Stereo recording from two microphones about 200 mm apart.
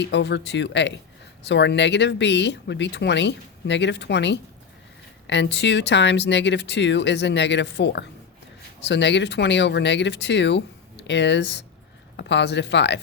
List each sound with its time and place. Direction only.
0.0 s speech: 60° left (ahead or behind)